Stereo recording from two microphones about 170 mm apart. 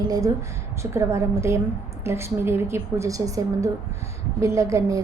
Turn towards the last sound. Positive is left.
turn(degrees=-20)  # may be behind; listen again after turning